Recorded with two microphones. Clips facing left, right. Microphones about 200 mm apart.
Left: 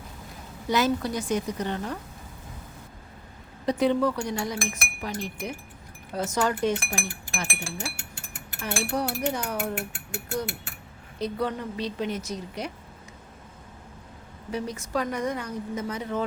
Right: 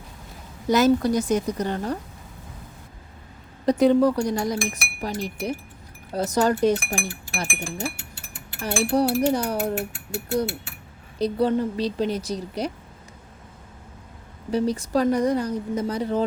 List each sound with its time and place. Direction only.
0.7 s speech: 40° right (ahead or behind)
3.7 s speech: 40° right (ahead or behind)
8.9 s speech: 30° right (ahead or behind)
11.2 s speech: 35° right (ahead or behind)
14.5 s speech: 35° right (ahead or behind)